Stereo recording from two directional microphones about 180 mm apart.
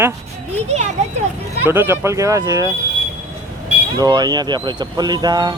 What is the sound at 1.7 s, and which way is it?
Speech, 15° right (ahead or behind).